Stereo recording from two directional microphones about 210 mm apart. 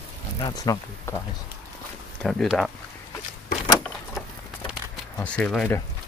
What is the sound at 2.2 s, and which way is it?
Speech, centre (ahead or behind).